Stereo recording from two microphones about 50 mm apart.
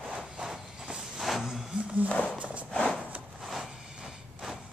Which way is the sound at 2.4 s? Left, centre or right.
Right.